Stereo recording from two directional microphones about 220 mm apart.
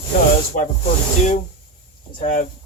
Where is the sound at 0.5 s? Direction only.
35° left (ahead or behind).